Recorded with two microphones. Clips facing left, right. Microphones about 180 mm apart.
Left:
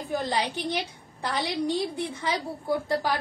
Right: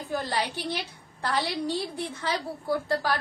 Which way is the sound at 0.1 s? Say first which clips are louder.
Left 2 dB; 15° left (ahead or behind).